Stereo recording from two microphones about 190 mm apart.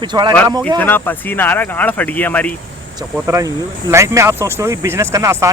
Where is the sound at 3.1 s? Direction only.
15° right (ahead or behind).